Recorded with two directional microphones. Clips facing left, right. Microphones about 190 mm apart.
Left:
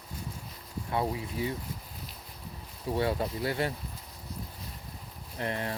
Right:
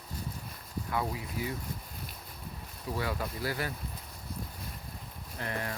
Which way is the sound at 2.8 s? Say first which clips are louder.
Left 5 dB; 25° left (ahead or behind).